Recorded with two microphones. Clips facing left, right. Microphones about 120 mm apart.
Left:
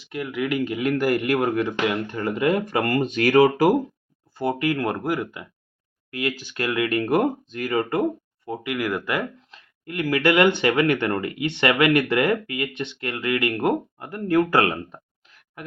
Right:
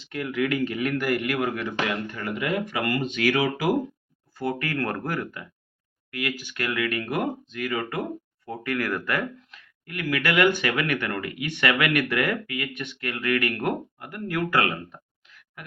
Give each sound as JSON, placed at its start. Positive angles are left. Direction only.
{"t": 0.0, "sound": "speech", "side_deg": 10}
{"t": 0.9, "sound": "speech", "side_deg": 35}
{"t": 4.4, "sound": "speech", "side_deg": 20}
{"t": 6.1, "sound": "speech", "side_deg": 30}
{"t": 8.4, "sound": "speech", "side_deg": 15}